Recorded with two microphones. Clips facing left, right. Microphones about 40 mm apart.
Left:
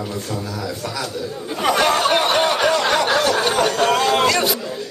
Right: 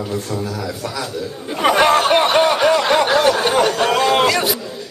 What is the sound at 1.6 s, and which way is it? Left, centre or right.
Speech, centre.